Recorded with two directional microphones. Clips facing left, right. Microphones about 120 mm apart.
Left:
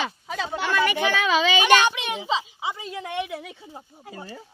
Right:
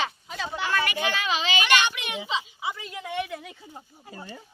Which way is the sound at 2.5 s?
20° left (ahead or behind).